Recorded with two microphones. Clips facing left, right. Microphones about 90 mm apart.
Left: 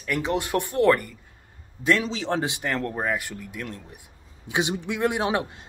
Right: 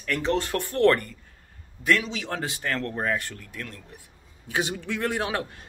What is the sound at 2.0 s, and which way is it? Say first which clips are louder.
A man's voice: left 5 dB; 30° left (ahead or behind).